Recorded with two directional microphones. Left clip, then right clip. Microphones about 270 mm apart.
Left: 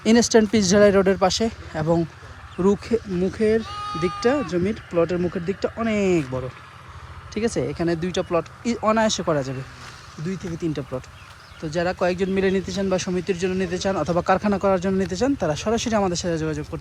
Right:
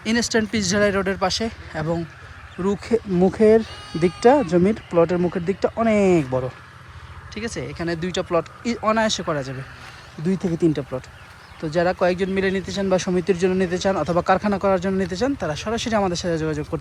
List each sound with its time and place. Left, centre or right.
0.0 s speech: left; by 6.5 s centre
7.3 s speech: centre
10.2 s speech: centre